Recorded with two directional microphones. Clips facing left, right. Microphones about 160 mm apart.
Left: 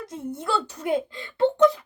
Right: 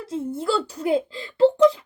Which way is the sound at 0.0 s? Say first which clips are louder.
Right 5 dB; 30° right (ahead or behind).